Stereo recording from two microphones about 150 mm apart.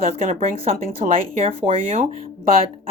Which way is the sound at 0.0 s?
45° right (ahead or behind).